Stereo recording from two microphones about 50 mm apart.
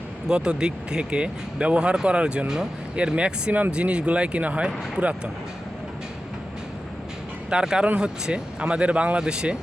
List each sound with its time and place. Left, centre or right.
0.3 s speech: centre
7.5 s speech: centre